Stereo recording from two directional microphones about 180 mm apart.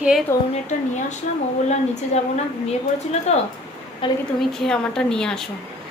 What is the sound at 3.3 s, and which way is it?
Speech, 35° left (ahead or behind).